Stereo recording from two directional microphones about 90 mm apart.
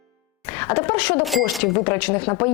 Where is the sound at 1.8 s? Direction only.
25° left (ahead or behind).